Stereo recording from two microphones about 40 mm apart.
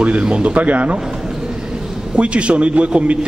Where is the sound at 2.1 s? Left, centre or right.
Right.